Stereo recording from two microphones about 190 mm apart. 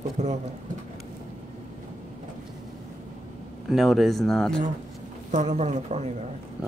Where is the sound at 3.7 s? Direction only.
Centre (ahead or behind).